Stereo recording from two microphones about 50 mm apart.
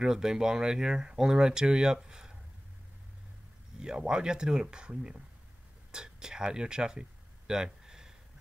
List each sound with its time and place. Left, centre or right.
0.0 s speech: centre
3.8 s speech: centre
5.9 s a sound: centre